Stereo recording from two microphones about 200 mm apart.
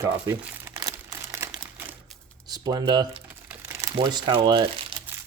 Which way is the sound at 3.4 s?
15° right (ahead or behind).